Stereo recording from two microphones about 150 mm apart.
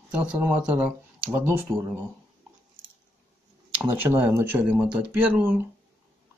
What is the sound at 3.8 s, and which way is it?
Speech, 10° right (ahead or behind).